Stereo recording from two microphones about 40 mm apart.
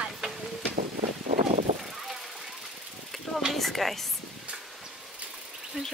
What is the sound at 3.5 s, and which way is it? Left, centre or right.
Chopping, centre.